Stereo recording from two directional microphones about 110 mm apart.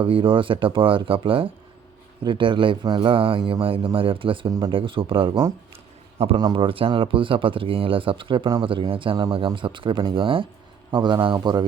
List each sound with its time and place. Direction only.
0.0 s speech: 50° right (ahead or behind)
4.4 s speech: 35° right (ahead or behind)
4.7 s speech: 55° right (ahead or behind)
5.7 s a sound: 65° right (ahead or behind)
6.3 s speech: 45° right (ahead or behind)